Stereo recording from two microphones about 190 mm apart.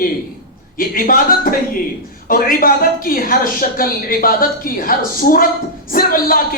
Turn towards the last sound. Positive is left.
turn(degrees=50)  # may be behind; listen again after turning